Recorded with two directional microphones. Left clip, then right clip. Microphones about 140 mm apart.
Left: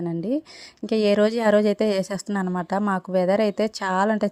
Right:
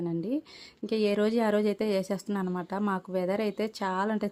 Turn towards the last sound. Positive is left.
turn(degrees=40)  # may be behind; listen again after turning